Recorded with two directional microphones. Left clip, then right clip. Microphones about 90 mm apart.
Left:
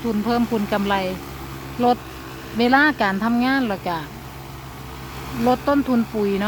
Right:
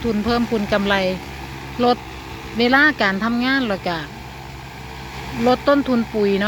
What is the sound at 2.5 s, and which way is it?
Speech, 25° left (ahead or behind).